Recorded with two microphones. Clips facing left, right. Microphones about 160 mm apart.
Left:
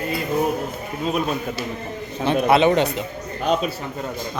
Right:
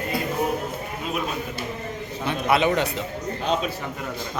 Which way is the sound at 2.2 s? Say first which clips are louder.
Left 5 dB; 30° left (ahead or behind).